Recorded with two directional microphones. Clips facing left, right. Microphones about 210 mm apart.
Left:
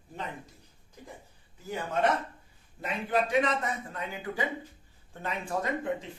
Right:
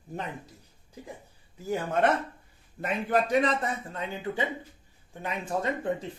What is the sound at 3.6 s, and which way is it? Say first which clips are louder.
Speech: right 2 dB; 25° right (ahead or behind).